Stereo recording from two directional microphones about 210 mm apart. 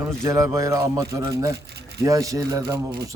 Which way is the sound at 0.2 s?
15° right (ahead or behind).